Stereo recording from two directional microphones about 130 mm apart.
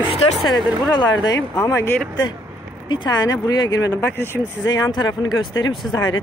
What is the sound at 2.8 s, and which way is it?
Speech, 35° left (ahead or behind).